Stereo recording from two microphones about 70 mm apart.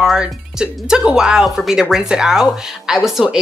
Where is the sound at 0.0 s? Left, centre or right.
Centre.